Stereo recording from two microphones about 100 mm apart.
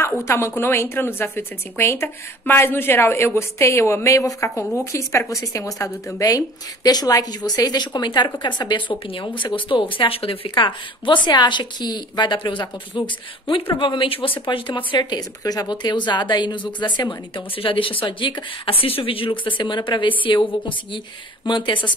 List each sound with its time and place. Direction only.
0.0 s a woman's voice: 30° left (ahead or behind); by 17.1 s 45° left (ahead or behind)
17.6 s a woman's voice: 60° left (ahead or behind)